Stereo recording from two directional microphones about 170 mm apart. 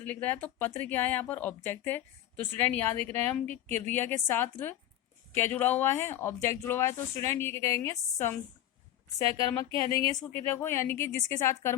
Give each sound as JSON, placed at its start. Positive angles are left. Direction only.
{"t": 0.0, "sound": "speech", "side_deg": 10}
{"t": 9.5, "sound": "speech", "side_deg": 20}